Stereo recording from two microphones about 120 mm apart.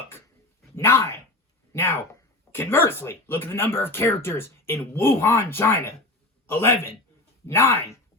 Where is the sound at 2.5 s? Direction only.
20° left (ahead or behind).